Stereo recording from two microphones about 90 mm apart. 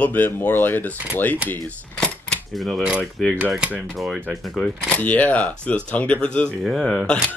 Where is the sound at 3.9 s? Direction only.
Centre (ahead or behind).